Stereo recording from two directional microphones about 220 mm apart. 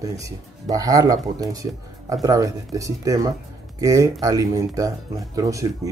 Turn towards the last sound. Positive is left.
turn(degrees=-15)  # may be behind; listen again after turning